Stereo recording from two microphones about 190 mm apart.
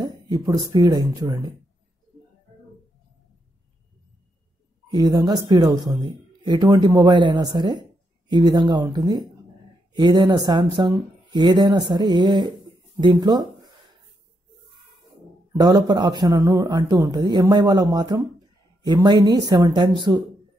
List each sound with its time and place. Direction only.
0.0 s speech: 20° right (ahead or behind)
4.9 s speech: 20° right (ahead or behind)
15.5 s speech: 20° right (ahead or behind)